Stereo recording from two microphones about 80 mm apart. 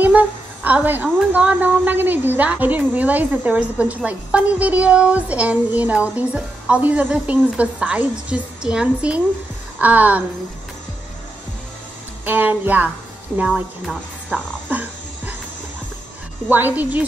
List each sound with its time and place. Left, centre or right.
0.0 s a sound: centre
1.3 s a woman's voice: centre
12.3 s speech: right
14.3 s a woman's voice: centre
14.7 s music: centre
16.4 s speech: right